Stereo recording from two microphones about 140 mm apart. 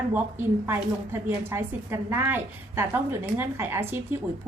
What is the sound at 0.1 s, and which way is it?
A woman's voice, 15° right (ahead or behind).